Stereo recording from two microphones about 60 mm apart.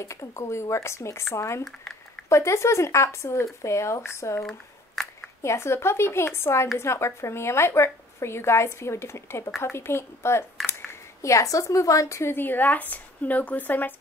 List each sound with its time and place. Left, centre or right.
0.0 s a woman's voice: left
4.4 s a sound: centre
5.4 s a woman's voice: left
12.4 s a woman's voice: left